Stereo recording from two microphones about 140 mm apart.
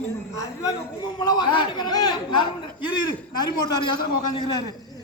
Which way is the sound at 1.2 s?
30° left (ahead or behind).